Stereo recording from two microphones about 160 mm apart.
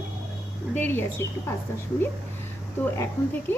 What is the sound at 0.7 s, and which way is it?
Speech, 10° left (ahead or behind).